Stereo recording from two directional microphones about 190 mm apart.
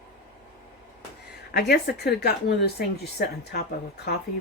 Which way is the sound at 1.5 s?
60° left (ahead or behind).